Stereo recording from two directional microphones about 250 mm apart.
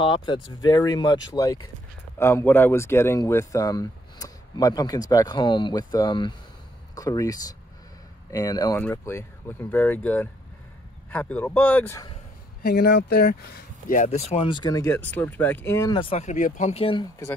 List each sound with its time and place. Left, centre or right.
0.0 s speech: centre
12.6 s speech: left